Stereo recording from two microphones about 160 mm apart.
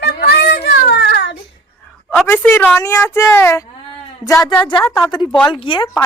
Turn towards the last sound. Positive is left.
turn(degrees=30)  # may be behind; listen again after turning